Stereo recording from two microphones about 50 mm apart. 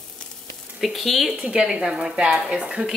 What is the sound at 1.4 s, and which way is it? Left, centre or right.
A woman's voice, centre.